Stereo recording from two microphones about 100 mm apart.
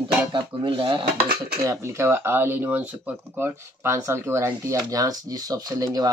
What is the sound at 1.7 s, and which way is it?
Speech, 25° right (ahead or behind).